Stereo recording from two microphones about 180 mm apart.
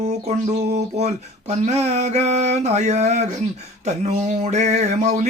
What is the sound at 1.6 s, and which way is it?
Mantra, 35° right (ahead or behind).